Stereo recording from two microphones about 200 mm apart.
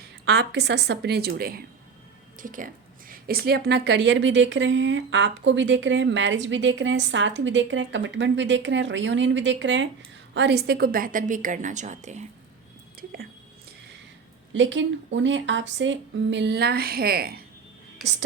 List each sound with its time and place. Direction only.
0.0 s speech: 55° right (ahead or behind)
10.3 s a woman's voice: 55° right (ahead or behind); by 12.2 s 35° right (ahead or behind)
13.0 s speech: 50° right (ahead or behind)
14.5 s speech: 65° right (ahead or behind); by 17.4 s 50° right (ahead or behind)